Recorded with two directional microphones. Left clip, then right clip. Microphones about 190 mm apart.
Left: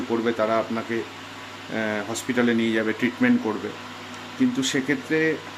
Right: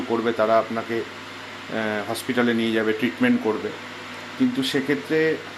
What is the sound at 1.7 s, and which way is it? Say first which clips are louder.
Speech: right 1 dB; 15° left (ahead or behind).